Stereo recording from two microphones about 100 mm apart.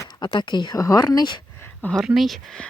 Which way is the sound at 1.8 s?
5° left (ahead or behind).